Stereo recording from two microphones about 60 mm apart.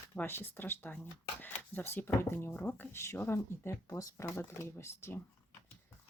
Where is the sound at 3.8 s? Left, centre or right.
Left.